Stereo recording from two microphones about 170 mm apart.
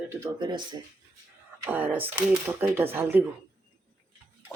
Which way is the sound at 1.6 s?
10° right (ahead or behind).